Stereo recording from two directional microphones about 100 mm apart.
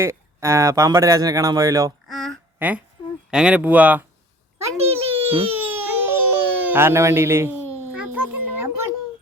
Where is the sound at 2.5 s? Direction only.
15° right (ahead or behind).